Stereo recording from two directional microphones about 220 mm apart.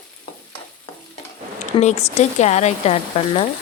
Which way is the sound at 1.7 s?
30° left (ahead or behind).